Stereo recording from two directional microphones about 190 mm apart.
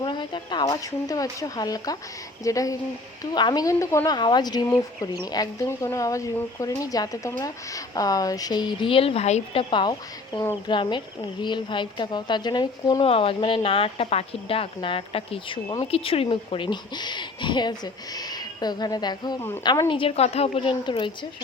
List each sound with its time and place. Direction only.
0.0 s a woman's voice: 25° left (ahead or behind)